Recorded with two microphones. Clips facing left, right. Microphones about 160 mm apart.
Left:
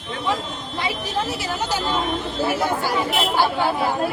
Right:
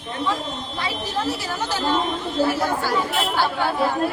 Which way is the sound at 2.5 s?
15° left (ahead or behind).